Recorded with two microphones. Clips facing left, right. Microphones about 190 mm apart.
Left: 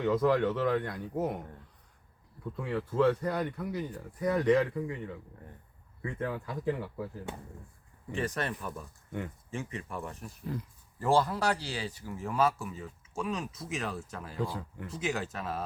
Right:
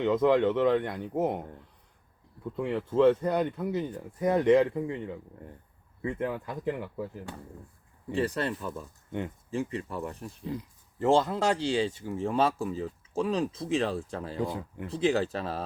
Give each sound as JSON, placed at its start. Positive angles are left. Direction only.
{"t": 0.0, "sound": "speech", "side_deg": -20}
{"t": 2.7, "sound": "speech", "side_deg": -25}
{"t": 6.0, "sound": "speech", "side_deg": -20}
{"t": 8.1, "sound": "speech", "side_deg": -30}
{"t": 10.5, "sound": "speech", "side_deg": -20}
{"t": 14.8, "sound": "speech", "side_deg": -30}